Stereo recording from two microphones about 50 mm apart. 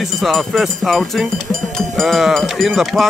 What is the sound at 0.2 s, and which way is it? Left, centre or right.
Speech, centre.